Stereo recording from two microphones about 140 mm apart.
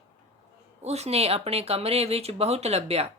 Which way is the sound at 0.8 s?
50° right (ahead or behind).